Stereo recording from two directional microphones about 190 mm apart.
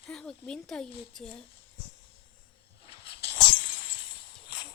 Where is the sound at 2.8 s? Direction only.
30° left (ahead or behind).